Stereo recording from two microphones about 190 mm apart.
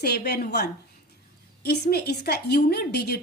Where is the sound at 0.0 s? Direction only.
60° left (ahead or behind).